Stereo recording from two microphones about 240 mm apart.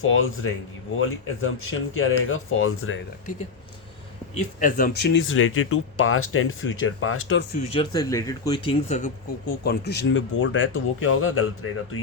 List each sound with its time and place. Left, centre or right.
0.0 s speech: left
4.6 s speech: left
7.6 s speech: left
9.6 s speech: left